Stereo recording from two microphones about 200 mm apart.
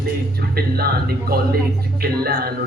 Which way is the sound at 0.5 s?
50° right (ahead or behind).